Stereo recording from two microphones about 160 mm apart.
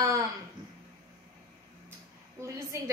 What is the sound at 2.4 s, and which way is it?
Speech, 20° right (ahead or behind).